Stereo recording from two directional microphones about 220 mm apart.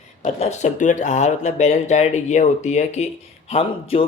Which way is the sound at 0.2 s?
30° left (ahead or behind).